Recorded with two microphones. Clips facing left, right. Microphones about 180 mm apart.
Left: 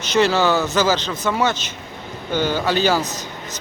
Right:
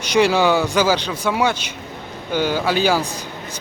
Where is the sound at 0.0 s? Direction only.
10° right (ahead or behind).